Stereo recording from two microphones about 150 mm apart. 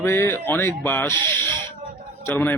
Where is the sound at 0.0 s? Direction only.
15° left (ahead or behind).